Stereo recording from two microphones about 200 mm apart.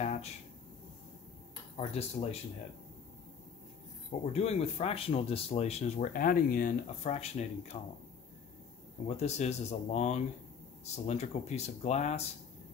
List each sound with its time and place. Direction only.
0.0 s a sound: 35° left (ahead or behind)
1.8 s speech: 30° left (ahead or behind)
4.1 s speech: 30° left (ahead or behind)
9.0 s speech: 35° left (ahead or behind)